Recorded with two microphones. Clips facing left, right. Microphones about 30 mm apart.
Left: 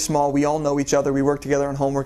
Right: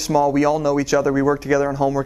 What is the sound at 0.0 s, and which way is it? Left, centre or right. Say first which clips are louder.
Speech: right 3 dB; centre.